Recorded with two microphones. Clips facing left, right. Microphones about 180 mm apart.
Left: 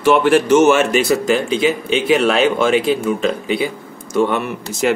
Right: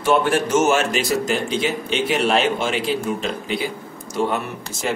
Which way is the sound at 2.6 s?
60° left (ahead or behind).